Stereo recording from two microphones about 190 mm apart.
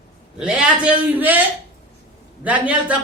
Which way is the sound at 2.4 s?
5° right (ahead or behind).